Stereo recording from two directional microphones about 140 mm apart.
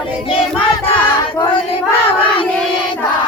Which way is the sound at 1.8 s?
10° left (ahead or behind).